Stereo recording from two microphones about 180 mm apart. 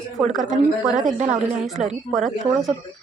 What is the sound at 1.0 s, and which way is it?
Speech, 45° right (ahead or behind).